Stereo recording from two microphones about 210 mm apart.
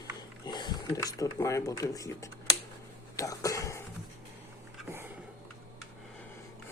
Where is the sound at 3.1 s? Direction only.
15° left (ahead or behind).